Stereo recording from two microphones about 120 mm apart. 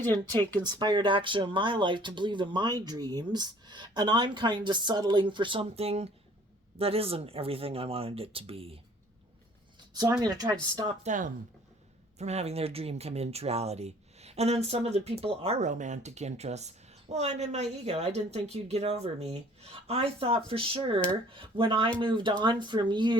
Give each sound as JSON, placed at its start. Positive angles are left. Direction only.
{"t": 0.6, "sound": "speech", "side_deg": -35}
{"t": 10.2, "sound": "speech", "side_deg": -35}
{"t": 11.0, "sound": "speech", "side_deg": -90}
{"t": 12.2, "sound": "speech", "side_deg": -65}